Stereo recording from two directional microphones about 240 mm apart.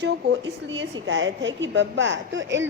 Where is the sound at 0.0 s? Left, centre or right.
Right.